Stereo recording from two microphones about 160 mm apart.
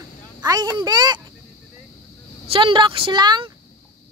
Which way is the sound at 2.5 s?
30° right (ahead or behind).